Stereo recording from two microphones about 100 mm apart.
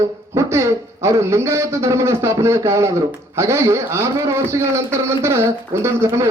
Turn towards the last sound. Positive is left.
turn(degrees=-25)  # may be behind; listen again after turning